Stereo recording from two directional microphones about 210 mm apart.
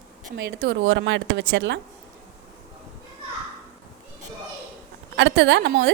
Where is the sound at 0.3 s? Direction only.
55° right (ahead or behind).